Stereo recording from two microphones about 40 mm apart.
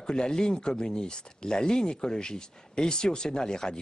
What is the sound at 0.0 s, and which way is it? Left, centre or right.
A man's voice, centre.